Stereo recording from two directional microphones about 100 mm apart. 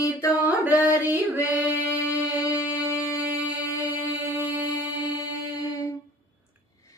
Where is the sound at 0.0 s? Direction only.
30° left (ahead or behind).